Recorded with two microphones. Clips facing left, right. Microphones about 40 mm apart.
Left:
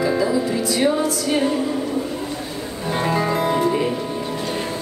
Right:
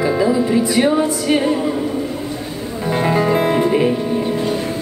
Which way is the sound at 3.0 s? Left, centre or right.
Centre.